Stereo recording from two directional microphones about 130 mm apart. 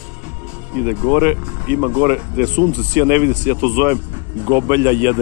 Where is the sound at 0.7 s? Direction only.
10° right (ahead or behind).